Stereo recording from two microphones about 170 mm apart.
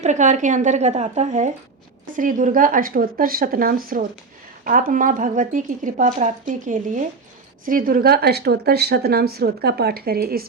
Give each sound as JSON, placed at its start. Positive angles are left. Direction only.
{"t": 0.0, "sound": "a woman's voice", "side_deg": -45}